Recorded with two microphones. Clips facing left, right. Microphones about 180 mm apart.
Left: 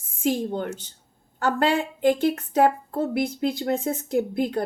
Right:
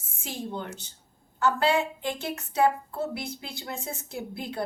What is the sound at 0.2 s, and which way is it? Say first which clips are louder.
A woman's voice: left 10 dB; 50° left (ahead or behind).